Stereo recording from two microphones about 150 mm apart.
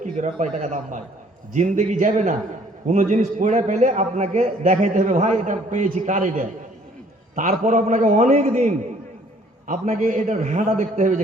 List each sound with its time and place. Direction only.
0.0 s a man's voice: 55° right (ahead or behind)
9.6 s a man's voice: 65° right (ahead or behind)